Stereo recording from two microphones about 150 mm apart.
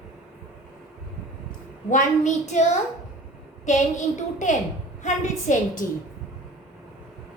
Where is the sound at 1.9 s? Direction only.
55° left (ahead or behind).